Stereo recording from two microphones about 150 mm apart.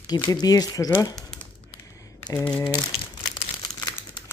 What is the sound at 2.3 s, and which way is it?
Speech, 10° left (ahead or behind).